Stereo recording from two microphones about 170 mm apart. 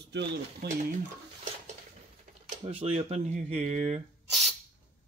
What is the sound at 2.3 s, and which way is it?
Camera, 50° right (ahead or behind).